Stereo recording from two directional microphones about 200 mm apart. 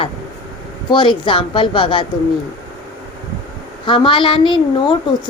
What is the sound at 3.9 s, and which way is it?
Speech, 25° left (ahead or behind).